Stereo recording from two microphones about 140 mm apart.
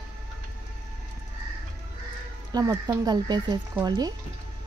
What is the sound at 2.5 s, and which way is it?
Speech, 25° right (ahead or behind).